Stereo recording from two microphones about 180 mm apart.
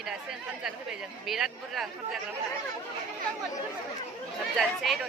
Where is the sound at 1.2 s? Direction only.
Centre (ahead or behind).